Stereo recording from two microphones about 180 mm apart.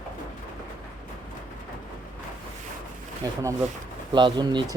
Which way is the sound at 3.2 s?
20° right (ahead or behind).